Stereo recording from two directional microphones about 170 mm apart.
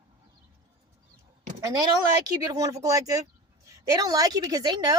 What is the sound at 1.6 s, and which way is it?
Speech, 20° right (ahead or behind).